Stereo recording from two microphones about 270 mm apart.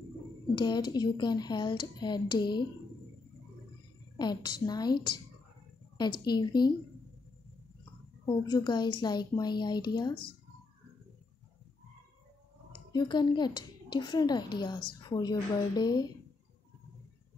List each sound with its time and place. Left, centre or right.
0.6 s speech: centre
4.2 s speech: centre
6.2 s speech: centre
8.3 s speech: centre
12.9 s speech: centre